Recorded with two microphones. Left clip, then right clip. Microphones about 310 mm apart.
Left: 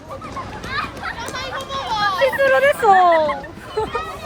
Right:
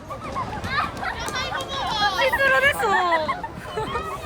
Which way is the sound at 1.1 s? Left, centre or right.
Centre.